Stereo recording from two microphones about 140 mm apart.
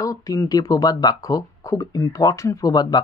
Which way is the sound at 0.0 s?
25° left (ahead or behind).